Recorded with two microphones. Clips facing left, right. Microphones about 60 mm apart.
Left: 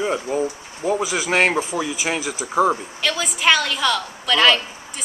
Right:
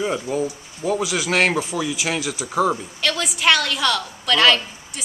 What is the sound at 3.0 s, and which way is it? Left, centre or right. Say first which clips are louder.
A woman's voice: even; centre.